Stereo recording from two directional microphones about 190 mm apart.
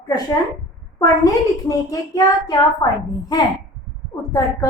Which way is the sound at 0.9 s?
20° left (ahead or behind).